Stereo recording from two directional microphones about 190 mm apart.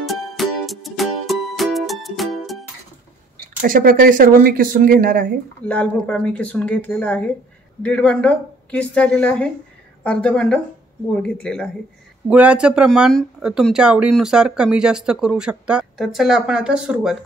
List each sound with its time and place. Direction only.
0.0 s music: centre (ahead or behind)
3.6 s speech: 45° right (ahead or behind)
5.7 s speech: 5° left (ahead or behind)
12.3 s speech: 5° right (ahead or behind)